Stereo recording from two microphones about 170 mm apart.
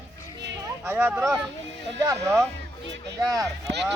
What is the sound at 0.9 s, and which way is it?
Speech, 15° right (ahead or behind).